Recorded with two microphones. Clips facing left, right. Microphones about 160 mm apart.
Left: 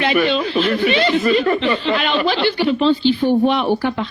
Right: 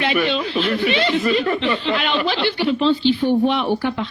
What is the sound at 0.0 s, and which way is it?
Speech, 45° left (ahead or behind).